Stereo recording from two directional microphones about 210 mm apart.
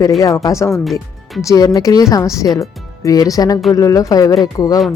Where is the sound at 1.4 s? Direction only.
15° left (ahead or behind).